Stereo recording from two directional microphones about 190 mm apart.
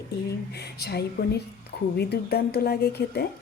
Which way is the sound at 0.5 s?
60° left (ahead or behind).